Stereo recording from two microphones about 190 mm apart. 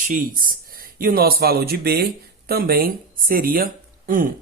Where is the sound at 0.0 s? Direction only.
45° right (ahead or behind).